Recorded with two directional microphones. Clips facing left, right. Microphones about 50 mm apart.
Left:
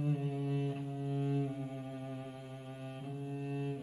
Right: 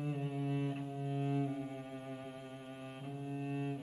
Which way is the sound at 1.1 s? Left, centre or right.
Right.